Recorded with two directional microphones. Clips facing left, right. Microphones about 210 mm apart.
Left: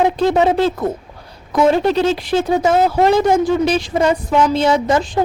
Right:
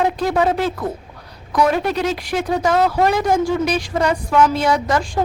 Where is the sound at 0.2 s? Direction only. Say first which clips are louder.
Left 4 dB; 25° left (ahead or behind).